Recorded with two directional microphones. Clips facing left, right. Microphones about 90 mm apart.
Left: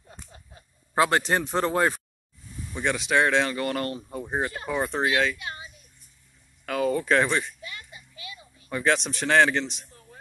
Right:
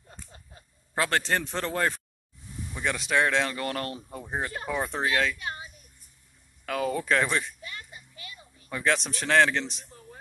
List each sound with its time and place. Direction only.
0.9 s speech: 15° left (ahead or behind)
2.7 s speech: centre (ahead or behind)
5.4 s a child's voice: 30° right (ahead or behind)
6.6 s speech: centre (ahead or behind)
7.6 s a sound: 35° right (ahead or behind)
8.6 s speech: centre (ahead or behind)